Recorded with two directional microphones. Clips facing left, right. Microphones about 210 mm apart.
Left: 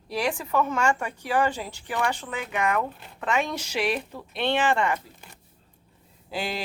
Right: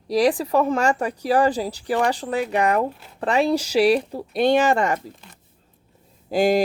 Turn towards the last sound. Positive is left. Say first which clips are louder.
# right 13 dB
turn(degrees=-45)  # may be behind; listen again after turning